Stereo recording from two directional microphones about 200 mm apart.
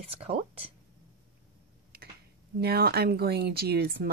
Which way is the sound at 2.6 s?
50° right (ahead or behind).